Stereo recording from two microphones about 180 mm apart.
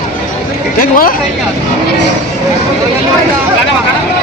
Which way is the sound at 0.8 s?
55° left (ahead or behind).